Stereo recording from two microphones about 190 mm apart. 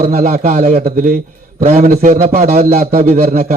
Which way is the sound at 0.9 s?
50° right (ahead or behind).